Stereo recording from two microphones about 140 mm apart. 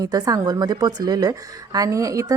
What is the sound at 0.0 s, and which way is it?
A woman's voice, 25° right (ahead or behind).